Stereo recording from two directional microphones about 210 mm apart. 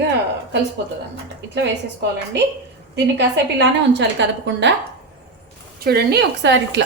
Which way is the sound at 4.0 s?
60° right (ahead or behind).